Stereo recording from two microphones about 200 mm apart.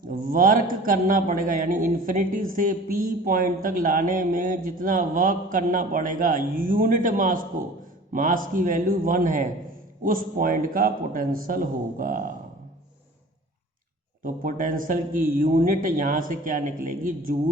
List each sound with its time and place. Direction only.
0.1 s a man's voice: 45° right (ahead or behind)
14.3 s a man's voice: 45° right (ahead or behind)